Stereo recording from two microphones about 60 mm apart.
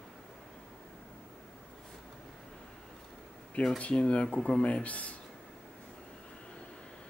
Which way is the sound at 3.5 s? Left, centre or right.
Centre.